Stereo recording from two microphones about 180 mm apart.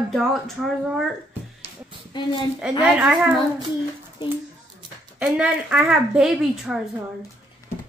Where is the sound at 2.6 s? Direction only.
5° right (ahead or behind).